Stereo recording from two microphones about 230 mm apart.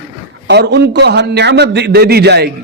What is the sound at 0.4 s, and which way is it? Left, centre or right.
A man's voice, right.